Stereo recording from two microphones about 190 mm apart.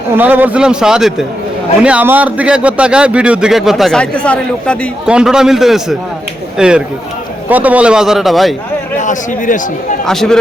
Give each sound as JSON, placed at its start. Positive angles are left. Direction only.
{"t": 0.2, "sound": "a man's voice", "side_deg": -10}
{"t": 9.0, "sound": "speech", "side_deg": 40}
{"t": 10.1, "sound": "a man's voice", "side_deg": 0}